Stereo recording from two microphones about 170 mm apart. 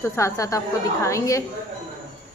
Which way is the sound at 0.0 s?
15° left (ahead or behind).